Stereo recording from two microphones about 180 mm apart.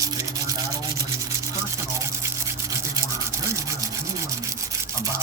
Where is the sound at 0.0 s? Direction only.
20° right (ahead or behind).